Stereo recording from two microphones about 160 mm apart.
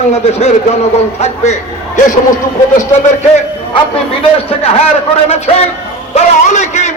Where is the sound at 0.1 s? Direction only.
45° left (ahead or behind).